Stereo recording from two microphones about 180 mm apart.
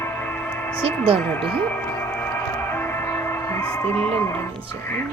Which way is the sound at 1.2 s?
10° left (ahead or behind).